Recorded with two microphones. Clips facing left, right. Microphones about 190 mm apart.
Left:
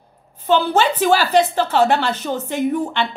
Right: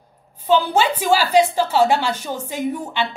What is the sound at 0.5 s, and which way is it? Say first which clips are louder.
A woman's voice: left 1 dB; 10° right (ahead or behind).